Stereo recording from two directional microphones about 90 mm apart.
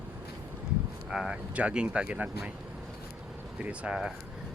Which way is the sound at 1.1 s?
5° right (ahead or behind).